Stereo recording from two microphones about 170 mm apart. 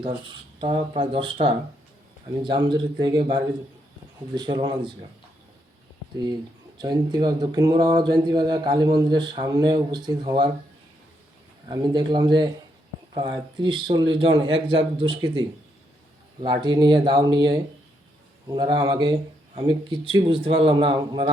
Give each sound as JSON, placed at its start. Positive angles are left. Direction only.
{"t": 0.6, "sound": "a man's voice", "side_deg": -30}
{"t": 6.7, "sound": "speech", "side_deg": -25}
{"t": 11.7, "sound": "a man's voice", "side_deg": -25}